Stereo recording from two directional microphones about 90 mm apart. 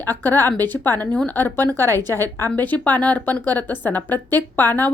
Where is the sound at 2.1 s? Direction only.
25° left (ahead or behind).